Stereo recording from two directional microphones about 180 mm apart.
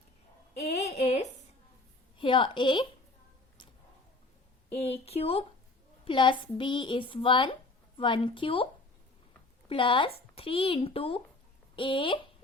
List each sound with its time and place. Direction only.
0.5 s a sound: 35° left (ahead or behind)
2.1 s a woman's voice: 25° left (ahead or behind)
4.7 s a child's voice: 35° left (ahead or behind)
9.6 s a woman's voice: 30° left (ahead or behind)